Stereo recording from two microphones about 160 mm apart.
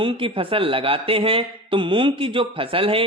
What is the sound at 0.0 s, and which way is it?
Speech, 35° right (ahead or behind).